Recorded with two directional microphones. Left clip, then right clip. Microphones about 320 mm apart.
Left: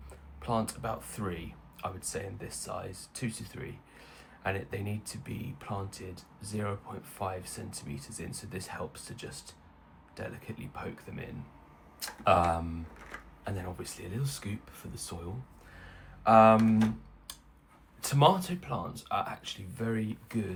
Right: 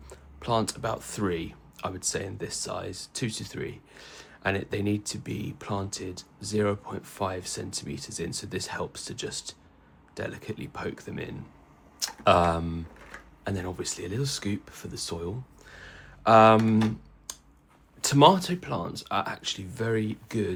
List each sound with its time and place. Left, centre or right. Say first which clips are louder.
0.1 s speech: right 6 dB; right
15.7 s a sound: right 7 dB; right
17.3 s scissors: right 5 dB; right
18.0 s speech: right 6 dB; right